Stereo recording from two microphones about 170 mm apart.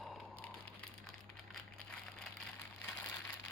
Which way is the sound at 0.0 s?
5° left (ahead or behind).